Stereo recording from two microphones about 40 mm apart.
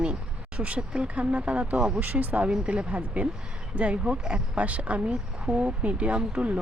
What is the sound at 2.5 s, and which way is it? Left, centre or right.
Speech, right.